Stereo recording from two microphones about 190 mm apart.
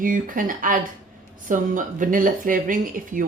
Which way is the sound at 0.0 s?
45° right (ahead or behind).